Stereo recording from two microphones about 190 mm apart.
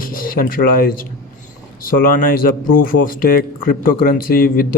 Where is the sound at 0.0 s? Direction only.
50° left (ahead or behind).